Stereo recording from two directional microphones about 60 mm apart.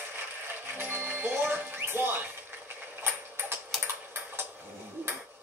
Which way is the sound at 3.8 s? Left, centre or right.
Right.